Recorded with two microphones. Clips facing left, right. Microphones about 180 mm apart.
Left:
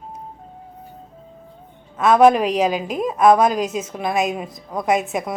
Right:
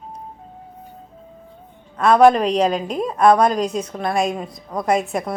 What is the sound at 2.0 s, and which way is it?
A woman's voice, centre (ahead or behind).